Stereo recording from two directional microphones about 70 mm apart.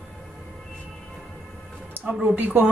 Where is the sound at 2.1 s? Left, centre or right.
Right.